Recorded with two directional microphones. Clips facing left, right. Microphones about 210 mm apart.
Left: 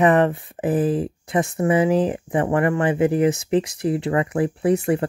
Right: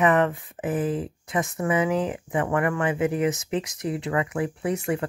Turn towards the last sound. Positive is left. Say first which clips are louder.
# left 7 dB
turn(degrees=30)  # may be behind; listen again after turning